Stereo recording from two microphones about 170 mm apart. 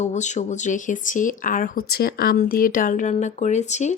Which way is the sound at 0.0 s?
45° left (ahead or behind).